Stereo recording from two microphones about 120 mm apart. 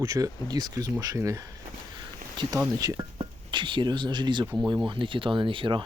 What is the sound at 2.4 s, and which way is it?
Speech, 40° right (ahead or behind).